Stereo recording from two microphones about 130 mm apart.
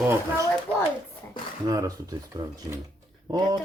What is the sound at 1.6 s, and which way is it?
Speech, 30° right (ahead or behind).